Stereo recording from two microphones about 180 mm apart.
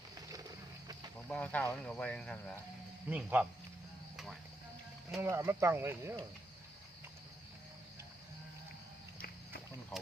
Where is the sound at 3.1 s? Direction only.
10° right (ahead or behind).